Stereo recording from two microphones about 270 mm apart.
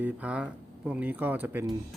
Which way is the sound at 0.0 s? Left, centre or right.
Centre.